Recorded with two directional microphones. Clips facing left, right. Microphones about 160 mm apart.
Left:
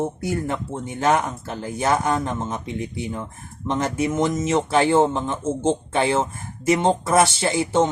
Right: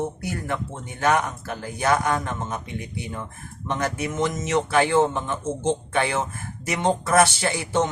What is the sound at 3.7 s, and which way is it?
Speech, 25° left (ahead or behind).